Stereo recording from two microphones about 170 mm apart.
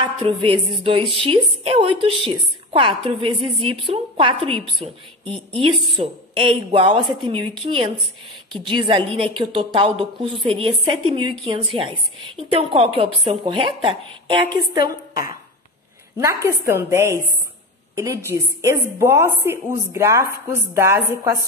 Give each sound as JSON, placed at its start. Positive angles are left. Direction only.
{"t": 0.0, "sound": "a woman's voice", "side_deg": -30}
{"t": 8.5, "sound": "a woman's voice", "side_deg": -30}
{"t": 16.4, "sound": "a woman's voice", "side_deg": -15}